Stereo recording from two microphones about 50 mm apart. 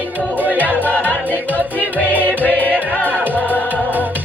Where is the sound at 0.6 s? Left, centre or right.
Left.